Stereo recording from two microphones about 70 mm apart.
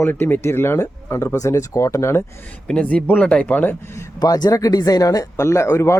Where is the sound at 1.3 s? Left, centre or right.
Left.